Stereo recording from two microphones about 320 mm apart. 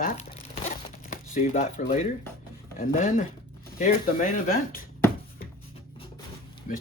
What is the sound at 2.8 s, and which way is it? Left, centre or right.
Speech, left.